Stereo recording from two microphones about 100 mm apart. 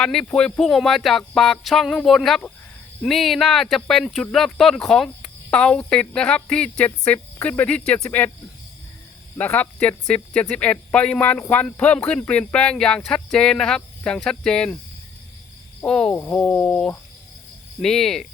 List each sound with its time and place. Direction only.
0.0 s speech: 5° left (ahead or behind)
9.4 s speech: 15° left (ahead or behind)
15.9 s speech: 10° left (ahead or behind)
16.1 s speech: 20° left (ahead or behind); by 18.3 s 5° left (ahead or behind)